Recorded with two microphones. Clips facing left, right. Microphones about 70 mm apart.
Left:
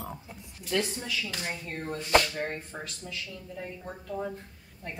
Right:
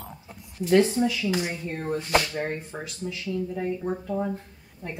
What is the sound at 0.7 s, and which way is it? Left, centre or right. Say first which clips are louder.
Speech: right 11 dB; right.